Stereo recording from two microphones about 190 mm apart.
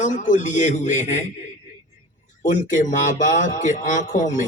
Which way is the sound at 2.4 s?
40° left (ahead or behind).